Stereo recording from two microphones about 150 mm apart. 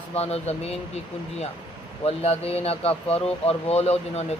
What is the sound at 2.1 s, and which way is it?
Speech, 45° left (ahead or behind).